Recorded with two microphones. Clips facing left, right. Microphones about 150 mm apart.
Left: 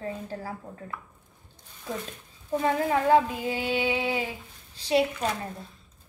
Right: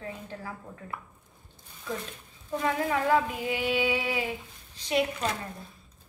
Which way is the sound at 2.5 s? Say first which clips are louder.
Left 3 dB; 30° left (ahead or behind).